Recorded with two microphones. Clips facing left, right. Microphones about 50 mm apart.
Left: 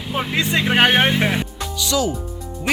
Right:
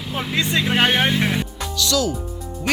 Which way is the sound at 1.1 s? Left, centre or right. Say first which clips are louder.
Left 1 dB; centre.